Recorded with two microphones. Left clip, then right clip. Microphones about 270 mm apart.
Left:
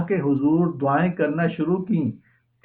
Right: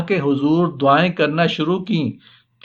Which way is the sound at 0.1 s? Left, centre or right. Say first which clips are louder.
Right 4 dB; right.